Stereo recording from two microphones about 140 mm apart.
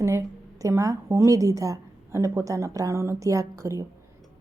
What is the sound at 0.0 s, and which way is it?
A woman's voice, 20° right (ahead or behind).